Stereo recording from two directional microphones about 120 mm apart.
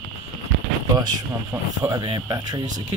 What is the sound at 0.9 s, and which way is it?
Speech, 30° right (ahead or behind).